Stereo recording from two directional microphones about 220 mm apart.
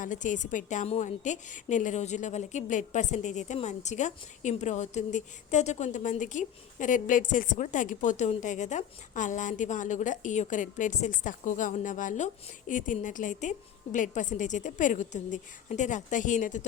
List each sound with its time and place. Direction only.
0.0 s a woman's voice: 35° left (ahead or behind)